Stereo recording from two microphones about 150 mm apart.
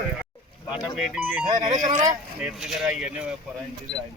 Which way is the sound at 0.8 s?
5° right (ahead or behind).